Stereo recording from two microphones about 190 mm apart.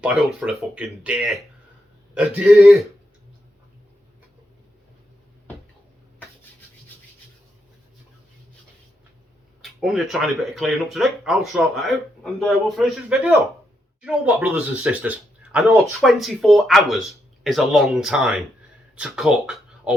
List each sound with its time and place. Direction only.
0.0 s speech: 5° right (ahead or behind)
9.6 s speech: centre (ahead or behind)